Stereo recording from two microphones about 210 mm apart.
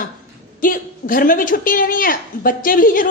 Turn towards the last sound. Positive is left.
turn(degrees=40)  # may be behind; listen again after turning